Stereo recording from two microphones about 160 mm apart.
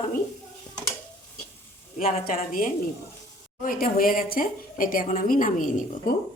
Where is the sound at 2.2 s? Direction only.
60° left (ahead or behind).